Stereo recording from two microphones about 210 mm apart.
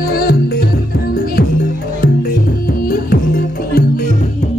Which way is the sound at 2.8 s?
45° left (ahead or behind).